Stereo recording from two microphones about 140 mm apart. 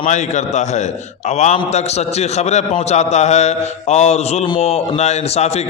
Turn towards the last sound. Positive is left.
turn(degrees=50)  # may be behind; listen again after turning